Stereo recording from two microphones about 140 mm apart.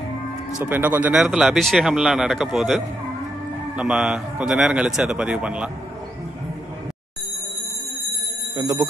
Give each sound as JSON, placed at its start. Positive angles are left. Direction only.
{"t": 0.6, "sound": "a man's voice", "side_deg": -10}
{"t": 8.5, "sound": "speech", "side_deg": -25}